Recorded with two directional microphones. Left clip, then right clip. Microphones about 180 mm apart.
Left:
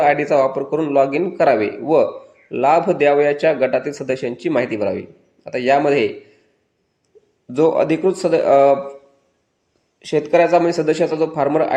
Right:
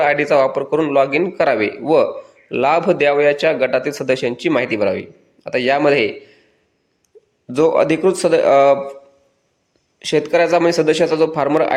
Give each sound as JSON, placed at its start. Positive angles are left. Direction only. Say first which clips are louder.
{"t": 0.0, "sound": "speech", "louder": "right 1 dB", "side_deg": -5}
{"t": 7.4, "sound": "speech", "louder": "right 2 dB", "side_deg": -5}
{"t": 10.0, "sound": "speech", "louder": "even", "side_deg": -5}